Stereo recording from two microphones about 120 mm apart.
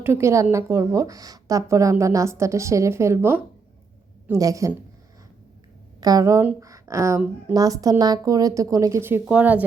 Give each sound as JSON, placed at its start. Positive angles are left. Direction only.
{"t": 0.0, "sound": "a woman's voice", "side_deg": -20}
{"t": 6.0, "sound": "speech", "side_deg": -30}
{"t": 6.6, "sound": "a sound", "side_deg": -30}
{"t": 7.5, "sound": "a woman's voice", "side_deg": -30}